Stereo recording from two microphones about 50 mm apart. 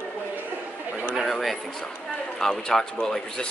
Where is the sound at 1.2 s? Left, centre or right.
Centre.